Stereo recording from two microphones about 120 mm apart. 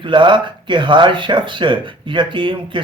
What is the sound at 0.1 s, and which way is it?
Speech, 40° right (ahead or behind).